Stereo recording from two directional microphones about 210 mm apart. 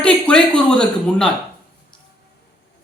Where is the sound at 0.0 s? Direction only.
5° left (ahead or behind).